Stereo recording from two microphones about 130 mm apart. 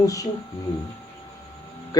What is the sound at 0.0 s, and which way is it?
Speech, 25° left (ahead or behind).